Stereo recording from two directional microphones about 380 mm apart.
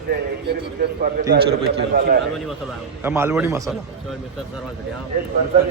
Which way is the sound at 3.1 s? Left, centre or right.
Centre.